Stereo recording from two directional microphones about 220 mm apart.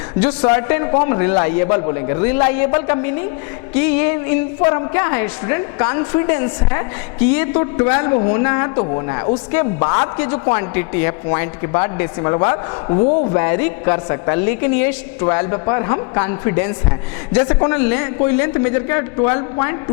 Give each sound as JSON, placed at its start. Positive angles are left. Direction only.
{"t": 0.3, "sound": "a woman's voice", "side_deg": 25}
{"t": 13.4, "sound": "a woman's voice", "side_deg": 20}